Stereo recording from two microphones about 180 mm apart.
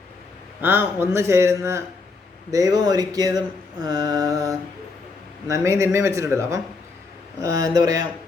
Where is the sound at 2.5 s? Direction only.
20° right (ahead or behind).